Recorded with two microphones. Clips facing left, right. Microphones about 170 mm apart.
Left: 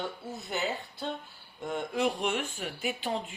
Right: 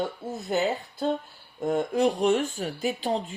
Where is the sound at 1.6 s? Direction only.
45° right (ahead or behind).